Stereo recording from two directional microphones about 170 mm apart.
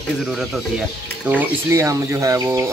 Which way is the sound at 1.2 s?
15° right (ahead or behind).